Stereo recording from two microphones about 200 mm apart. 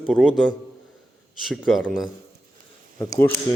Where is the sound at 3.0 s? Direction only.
15° left (ahead or behind).